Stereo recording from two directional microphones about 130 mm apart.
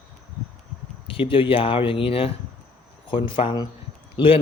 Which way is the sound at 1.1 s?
40° left (ahead or behind).